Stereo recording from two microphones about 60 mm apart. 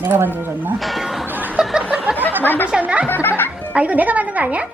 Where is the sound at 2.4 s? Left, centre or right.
Left.